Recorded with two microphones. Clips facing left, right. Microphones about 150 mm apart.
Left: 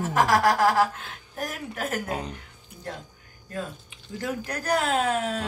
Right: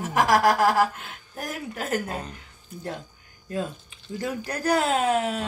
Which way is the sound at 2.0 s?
15° left (ahead or behind).